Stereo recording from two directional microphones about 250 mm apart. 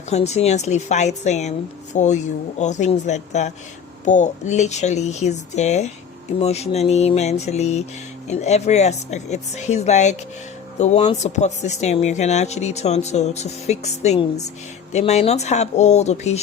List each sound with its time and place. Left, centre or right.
0.1 s speech: left